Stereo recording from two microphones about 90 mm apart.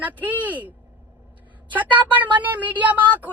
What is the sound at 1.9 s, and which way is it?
Speech, 20° right (ahead or behind).